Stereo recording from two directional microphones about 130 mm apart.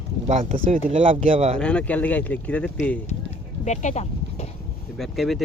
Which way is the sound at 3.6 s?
65° left (ahead or behind).